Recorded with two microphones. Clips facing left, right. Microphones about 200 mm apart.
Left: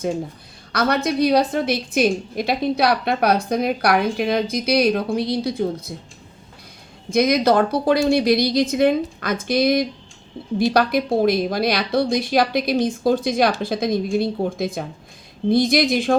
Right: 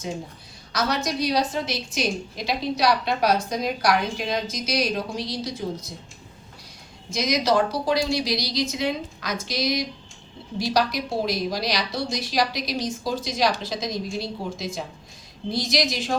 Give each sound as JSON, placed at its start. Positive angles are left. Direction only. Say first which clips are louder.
{"t": 0.7, "sound": "a woman's voice", "louder": "left 5 dB", "side_deg": 55}
{"t": 7.1, "sound": "a woman's voice", "louder": "left 6 dB", "side_deg": 55}